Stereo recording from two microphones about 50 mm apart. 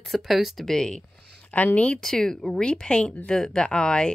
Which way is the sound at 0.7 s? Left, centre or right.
Centre.